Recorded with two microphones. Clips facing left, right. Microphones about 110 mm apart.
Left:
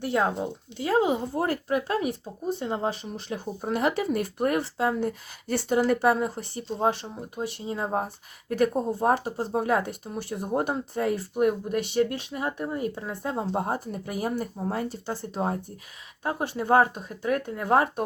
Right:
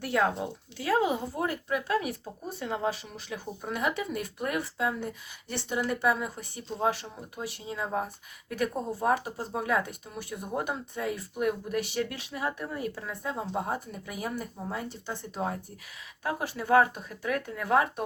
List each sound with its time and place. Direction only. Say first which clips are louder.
0.0 s speech: left 2 dB; 25° left (ahead or behind)
1.5 s speech: left 2 dB; 40° left (ahead or behind)
6.7 s speech: left 3 dB; 30° left (ahead or behind)
13.2 s speech: left 4 dB; 45° left (ahead or behind)